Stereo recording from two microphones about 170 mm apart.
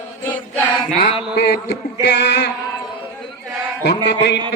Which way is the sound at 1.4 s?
75° left (ahead or behind).